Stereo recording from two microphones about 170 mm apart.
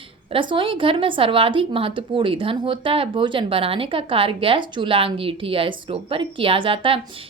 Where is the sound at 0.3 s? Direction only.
30° right (ahead or behind).